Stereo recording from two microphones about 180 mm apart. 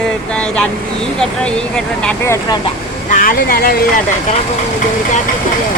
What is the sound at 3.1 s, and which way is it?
Speech, 55° left (ahead or behind).